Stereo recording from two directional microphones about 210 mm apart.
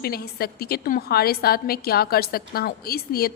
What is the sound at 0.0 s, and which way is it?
A woman's voice, 45° left (ahead or behind).